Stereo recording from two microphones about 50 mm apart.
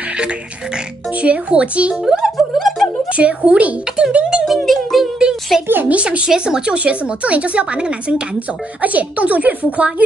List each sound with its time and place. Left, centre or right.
1.2 s speech: right; by 2.9 s centre
3.1 s speech: right
4.6 s music: centre
5.5 s a woman's voice: centre
5.9 s speech: right